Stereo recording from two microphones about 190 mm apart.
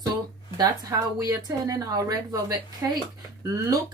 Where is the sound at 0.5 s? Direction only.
20° right (ahead or behind).